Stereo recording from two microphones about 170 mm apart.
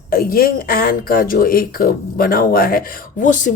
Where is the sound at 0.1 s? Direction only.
60° left (ahead or behind).